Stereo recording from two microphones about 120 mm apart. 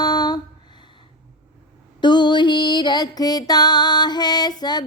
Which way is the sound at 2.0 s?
40° left (ahead or behind).